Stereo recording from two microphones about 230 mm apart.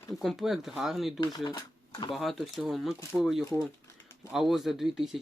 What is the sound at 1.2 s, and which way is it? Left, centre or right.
Speech, centre.